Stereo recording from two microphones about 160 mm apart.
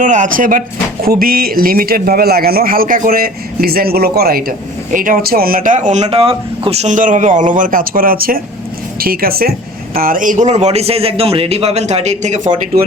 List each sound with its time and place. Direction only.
0.0 s a man's voice: 50° right (ahead or behind)